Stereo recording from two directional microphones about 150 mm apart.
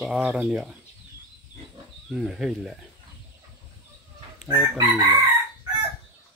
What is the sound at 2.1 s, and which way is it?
Speech, 5° right (ahead or behind).